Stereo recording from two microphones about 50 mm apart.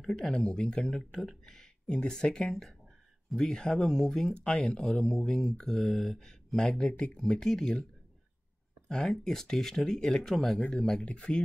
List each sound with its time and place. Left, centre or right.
0.1 s speech: centre
8.8 s speech: centre